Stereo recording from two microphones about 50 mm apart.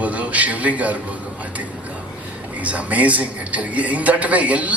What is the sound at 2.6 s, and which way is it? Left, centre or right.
A man's voice, right.